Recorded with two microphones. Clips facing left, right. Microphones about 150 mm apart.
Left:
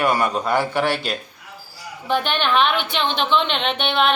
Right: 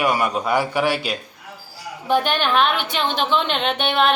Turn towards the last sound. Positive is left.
turn(degrees=-5)  # may be behind; listen again after turning